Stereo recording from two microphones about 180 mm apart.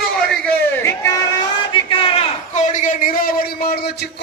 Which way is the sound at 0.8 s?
15° left (ahead or behind).